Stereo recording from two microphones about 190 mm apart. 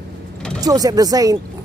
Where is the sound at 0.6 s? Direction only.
20° right (ahead or behind).